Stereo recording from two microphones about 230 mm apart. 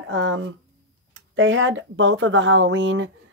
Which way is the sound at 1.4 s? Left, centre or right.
Right.